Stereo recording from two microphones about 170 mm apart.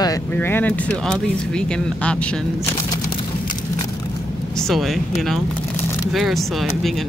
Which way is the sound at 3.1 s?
25° left (ahead or behind).